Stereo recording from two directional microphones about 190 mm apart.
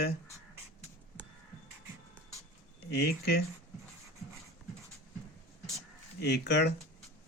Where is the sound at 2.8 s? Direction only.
60° left (ahead or behind).